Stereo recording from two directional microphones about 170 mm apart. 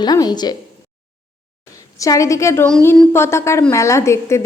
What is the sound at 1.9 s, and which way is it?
A woman's voice, 20° left (ahead or behind).